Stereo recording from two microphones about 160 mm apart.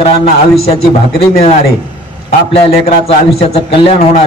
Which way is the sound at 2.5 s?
40° left (ahead or behind).